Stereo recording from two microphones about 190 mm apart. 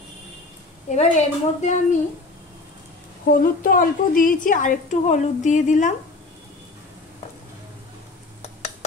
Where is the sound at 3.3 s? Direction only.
50° left (ahead or behind).